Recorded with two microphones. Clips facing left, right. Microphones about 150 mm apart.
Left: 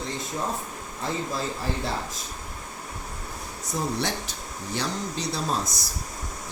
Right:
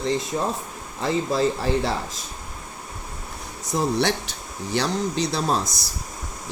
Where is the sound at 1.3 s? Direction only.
85° right.